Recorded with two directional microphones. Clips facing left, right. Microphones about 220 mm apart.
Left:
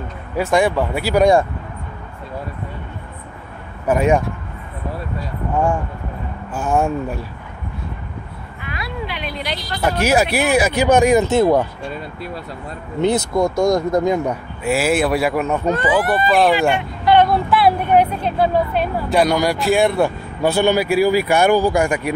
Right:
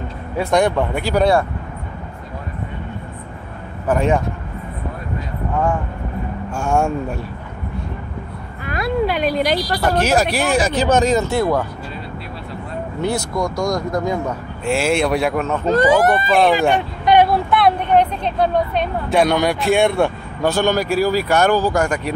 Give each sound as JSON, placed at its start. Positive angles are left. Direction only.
{"t": 0.4, "sound": "speech", "side_deg": 5}
{"t": 3.8, "sound": "speech", "side_deg": 10}
{"t": 6.5, "sound": "speech", "side_deg": 0}
{"t": 8.6, "sound": "a sound", "side_deg": -45}
{"t": 9.8, "sound": "speech", "side_deg": 10}
{"t": 13.0, "sound": "speech", "side_deg": 20}
{"t": 14.6, "sound": "speech", "side_deg": 5}
{"t": 15.7, "sound": "speech", "side_deg": -40}
{"t": 17.0, "sound": "vehicle", "side_deg": -15}
{"t": 17.3, "sound": "speech", "side_deg": 5}